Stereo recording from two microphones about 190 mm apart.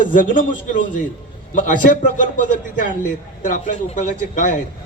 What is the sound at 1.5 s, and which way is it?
A man's voice, 45° left (ahead or behind).